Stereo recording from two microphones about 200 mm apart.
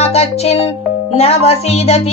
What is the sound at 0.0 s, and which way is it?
Music, 30° left (ahead or behind).